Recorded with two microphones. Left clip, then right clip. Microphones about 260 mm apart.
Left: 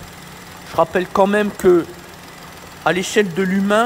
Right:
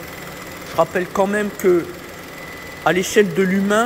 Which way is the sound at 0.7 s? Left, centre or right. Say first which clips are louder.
Left 2 dB; left.